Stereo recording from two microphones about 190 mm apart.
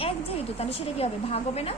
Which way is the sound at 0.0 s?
30° left (ahead or behind).